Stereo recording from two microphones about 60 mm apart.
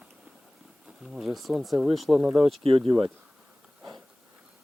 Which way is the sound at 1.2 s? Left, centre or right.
Centre.